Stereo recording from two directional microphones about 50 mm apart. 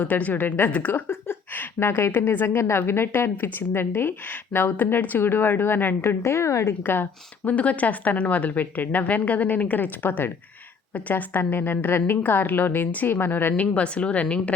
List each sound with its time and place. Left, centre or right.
0.0 s a woman's voice: left
1.0 s a woman's voice: left
2.6 s a woman's voice: left
4.5 s a woman's voice: left
5.2 s a woman's voice: left
6.2 s a woman's voice: left
6.8 s a woman's voice: left
7.4 s a woman's voice: left
11.5 s a woman's voice: left
13.7 s a woman's voice: left